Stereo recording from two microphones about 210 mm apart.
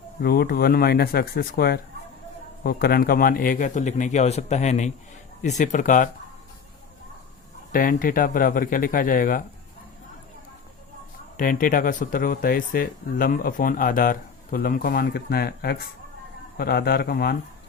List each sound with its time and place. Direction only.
0.2 s speech: 45° left (ahead or behind)
7.7 s speech: 40° left (ahead or behind)
11.3 s speech: 40° left (ahead or behind)